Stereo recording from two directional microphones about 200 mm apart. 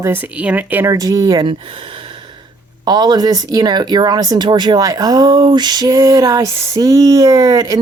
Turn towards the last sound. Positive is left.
turn(degrees=-15)  # may be behind; listen again after turning